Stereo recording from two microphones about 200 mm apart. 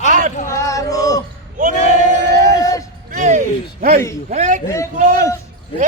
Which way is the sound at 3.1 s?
40° right (ahead or behind).